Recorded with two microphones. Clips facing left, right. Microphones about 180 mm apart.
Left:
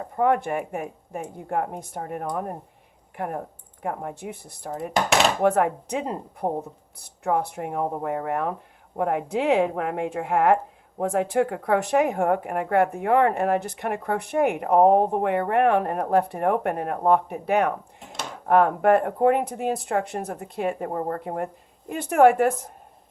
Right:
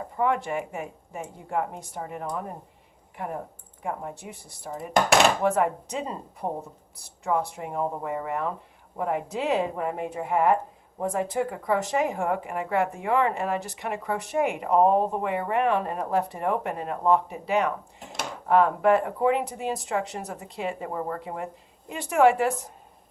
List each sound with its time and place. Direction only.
0.2 s a woman's voice: 55° left (ahead or behind)